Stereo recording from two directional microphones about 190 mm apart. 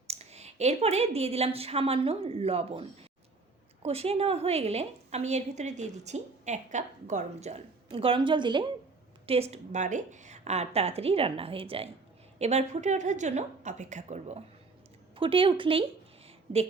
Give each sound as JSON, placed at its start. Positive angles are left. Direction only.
{"t": 0.1, "sound": "a woman's voice", "side_deg": -35}
{"t": 3.8, "sound": "a woman's voice", "side_deg": -30}
{"t": 16.2, "sound": "a sound", "side_deg": -30}